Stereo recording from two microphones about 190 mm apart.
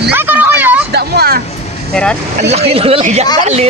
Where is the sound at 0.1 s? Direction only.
10° right (ahead or behind).